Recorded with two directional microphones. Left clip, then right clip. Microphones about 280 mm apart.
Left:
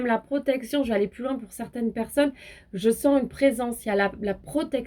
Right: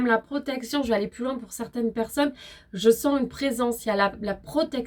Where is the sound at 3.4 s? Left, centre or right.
Right.